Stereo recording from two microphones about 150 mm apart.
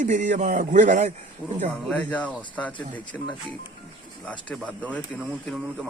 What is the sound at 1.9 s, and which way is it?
Speech, 10° left (ahead or behind).